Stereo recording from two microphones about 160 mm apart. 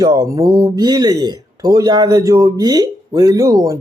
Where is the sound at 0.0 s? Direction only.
20° right (ahead or behind).